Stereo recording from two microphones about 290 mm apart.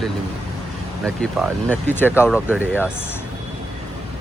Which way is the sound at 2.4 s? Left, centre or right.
Centre.